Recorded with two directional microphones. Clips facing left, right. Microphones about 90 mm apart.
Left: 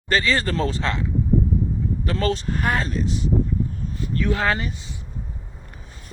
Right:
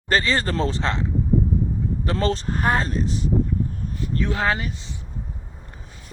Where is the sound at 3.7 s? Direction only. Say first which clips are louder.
Even; 30° right (ahead or behind).